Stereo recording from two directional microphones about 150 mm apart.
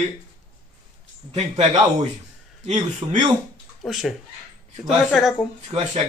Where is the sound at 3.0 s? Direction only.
30° right (ahead or behind).